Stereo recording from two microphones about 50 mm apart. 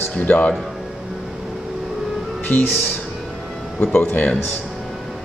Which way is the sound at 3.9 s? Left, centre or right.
Left.